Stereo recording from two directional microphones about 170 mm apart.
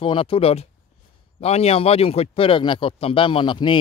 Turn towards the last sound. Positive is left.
turn(degrees=30)  # may be behind; listen again after turning